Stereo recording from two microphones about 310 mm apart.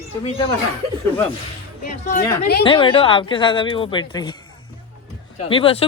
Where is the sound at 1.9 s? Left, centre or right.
Left.